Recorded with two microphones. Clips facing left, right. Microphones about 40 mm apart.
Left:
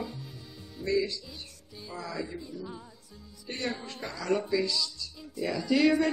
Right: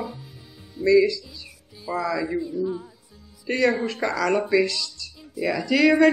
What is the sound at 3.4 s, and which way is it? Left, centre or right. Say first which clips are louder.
A man's voice: right 13 dB; right.